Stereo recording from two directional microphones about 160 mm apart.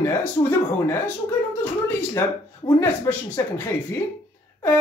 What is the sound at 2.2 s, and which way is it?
Speech, 15° left (ahead or behind).